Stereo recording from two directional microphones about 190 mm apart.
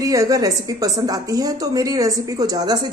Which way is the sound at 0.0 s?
15° right (ahead or behind).